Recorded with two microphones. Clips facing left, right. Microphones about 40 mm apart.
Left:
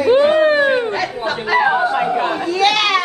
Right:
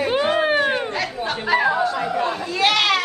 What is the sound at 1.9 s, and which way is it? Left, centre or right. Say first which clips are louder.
Chatter: left 5 dB; left.